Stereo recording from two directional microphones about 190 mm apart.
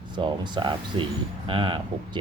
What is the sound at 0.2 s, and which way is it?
Speech, 25° right (ahead or behind).